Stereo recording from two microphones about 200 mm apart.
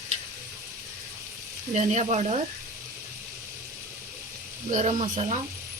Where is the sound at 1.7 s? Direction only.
35° right (ahead or behind).